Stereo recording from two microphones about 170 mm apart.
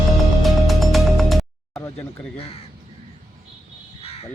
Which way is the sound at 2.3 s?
35° left (ahead or behind).